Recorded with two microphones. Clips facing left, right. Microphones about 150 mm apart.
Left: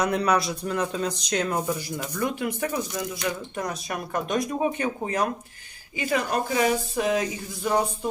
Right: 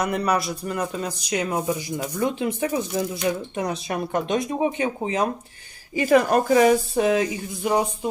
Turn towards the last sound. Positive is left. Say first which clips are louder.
# right 2 dB
turn(degrees=-15)  # may be behind; listen again after turning